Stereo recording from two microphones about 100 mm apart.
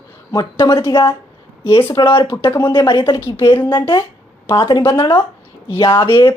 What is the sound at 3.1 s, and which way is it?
Speech, 30° left (ahead or behind).